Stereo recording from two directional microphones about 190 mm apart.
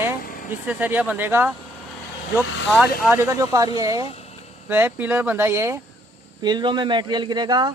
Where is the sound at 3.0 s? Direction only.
10° right (ahead or behind).